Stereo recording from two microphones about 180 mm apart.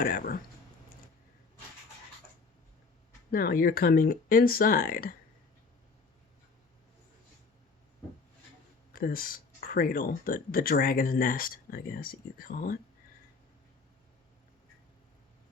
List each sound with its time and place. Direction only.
0.0 s speech: 55° left (ahead or behind)
3.3 s speech: 55° left (ahead or behind)
8.9 s speech: 55° left (ahead or behind)